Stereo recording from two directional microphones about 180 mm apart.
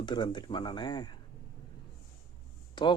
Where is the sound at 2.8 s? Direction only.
25° left (ahead or behind).